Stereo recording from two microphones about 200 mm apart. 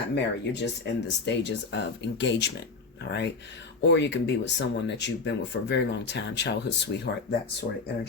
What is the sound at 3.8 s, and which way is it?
Speech, 60° left (ahead or behind).